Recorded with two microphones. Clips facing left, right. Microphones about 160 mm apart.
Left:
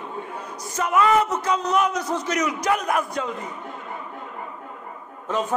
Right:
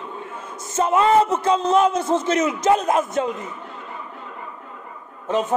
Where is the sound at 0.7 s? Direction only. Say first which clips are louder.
Right 3 dB; 25° right (ahead or behind).